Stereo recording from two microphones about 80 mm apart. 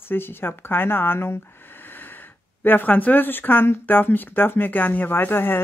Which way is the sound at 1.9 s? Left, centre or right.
Left.